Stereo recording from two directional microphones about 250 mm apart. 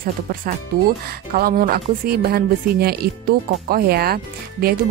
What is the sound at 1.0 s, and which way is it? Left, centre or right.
Speech, right.